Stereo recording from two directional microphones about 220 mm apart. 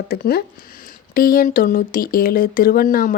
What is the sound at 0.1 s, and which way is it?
Speech, 45° left (ahead or behind).